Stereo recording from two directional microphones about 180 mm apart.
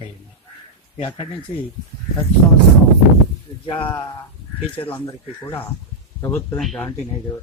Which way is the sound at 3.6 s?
30° left (ahead or behind).